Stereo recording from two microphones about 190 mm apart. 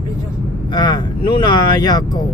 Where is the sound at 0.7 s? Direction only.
25° left (ahead or behind).